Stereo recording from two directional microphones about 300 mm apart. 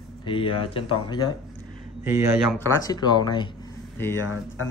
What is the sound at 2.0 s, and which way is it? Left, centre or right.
Speech, centre.